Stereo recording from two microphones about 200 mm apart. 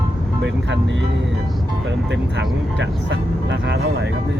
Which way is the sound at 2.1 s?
65° right (ahead or behind).